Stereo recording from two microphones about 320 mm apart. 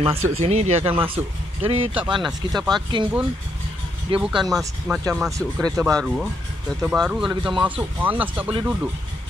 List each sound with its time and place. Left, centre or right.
0.0 s speech: centre
0.3 s speech: centre
2.2 s speech: centre
2.7 s speech: centre
4.2 s speech: centre